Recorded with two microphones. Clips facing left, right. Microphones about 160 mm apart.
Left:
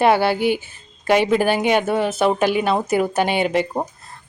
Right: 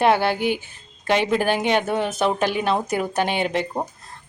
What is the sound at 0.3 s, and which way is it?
Speech, 50° right (ahead or behind).